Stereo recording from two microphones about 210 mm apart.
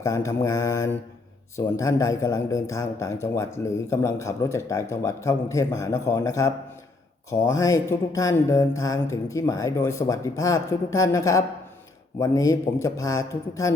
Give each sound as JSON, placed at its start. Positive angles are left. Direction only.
{"t": 0.0, "sound": "a man's voice", "side_deg": 15}